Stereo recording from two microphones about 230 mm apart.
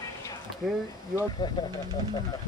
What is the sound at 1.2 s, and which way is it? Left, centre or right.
Speech, centre.